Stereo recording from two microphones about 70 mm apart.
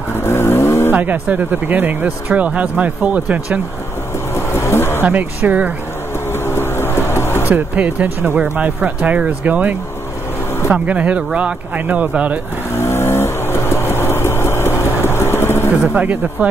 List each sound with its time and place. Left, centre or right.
0.2 s vehicle: left
0.9 s speech: right
4.4 s vehicle: left
5.0 s speech: right
6.4 s vehicle: left
7.4 s speech: right
12.7 s vehicle: left
15.8 s speech: centre